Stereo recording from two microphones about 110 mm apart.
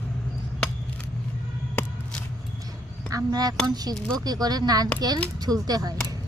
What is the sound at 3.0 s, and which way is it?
A woman's voice, 35° right (ahead or behind).